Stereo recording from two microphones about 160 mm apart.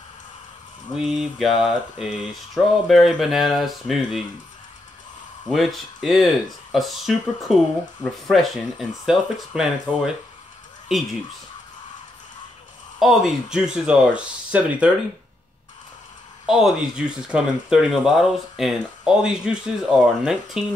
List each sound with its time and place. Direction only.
0.9 s speech: centre (ahead or behind)
5.5 s speech: centre (ahead or behind)
13.0 s speech: 5° right (ahead or behind)
16.4 s speech: 5° right (ahead or behind)